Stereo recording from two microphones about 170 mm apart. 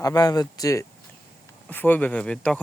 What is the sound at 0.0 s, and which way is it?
Speech, 20° left (ahead or behind).